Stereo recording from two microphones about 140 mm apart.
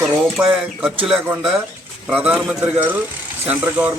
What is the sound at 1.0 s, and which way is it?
Speech, 5° right (ahead or behind).